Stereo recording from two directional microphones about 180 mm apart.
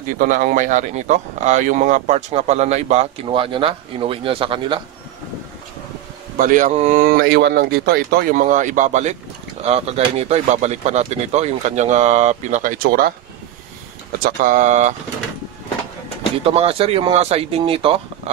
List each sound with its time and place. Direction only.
0.2 s speech: 50° right (ahead or behind); by 4.8 s 30° right (ahead or behind)
6.3 s speech: 50° right (ahead or behind)
14.2 s speech: 50° right (ahead or behind)
16.4 s speech: 35° right (ahead or behind)